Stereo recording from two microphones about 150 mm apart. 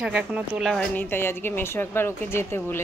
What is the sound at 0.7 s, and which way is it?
Speech, 10° left (ahead or behind).